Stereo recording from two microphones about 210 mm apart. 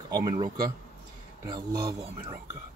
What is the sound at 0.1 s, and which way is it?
Speech, 15° right (ahead or behind).